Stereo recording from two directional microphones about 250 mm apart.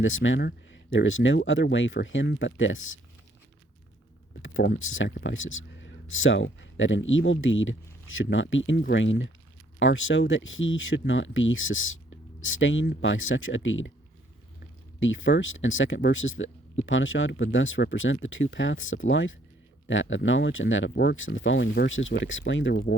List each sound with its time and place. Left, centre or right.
0.0 s speech: left
4.4 s speech: left
14.9 s speech: left